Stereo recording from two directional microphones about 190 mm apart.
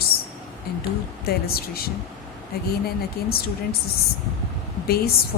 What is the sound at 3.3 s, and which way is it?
Speech, 55° left (ahead or behind).